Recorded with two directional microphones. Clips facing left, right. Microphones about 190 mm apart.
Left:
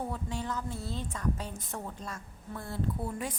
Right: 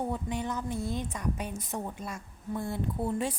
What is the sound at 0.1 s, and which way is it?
A woman's voice, 20° right (ahead or behind).